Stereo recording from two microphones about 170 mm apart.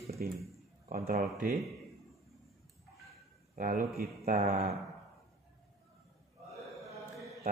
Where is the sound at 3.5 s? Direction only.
60° right (ahead or behind).